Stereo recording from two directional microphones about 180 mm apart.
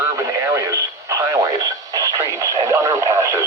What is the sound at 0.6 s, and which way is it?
Speech, 20° right (ahead or behind).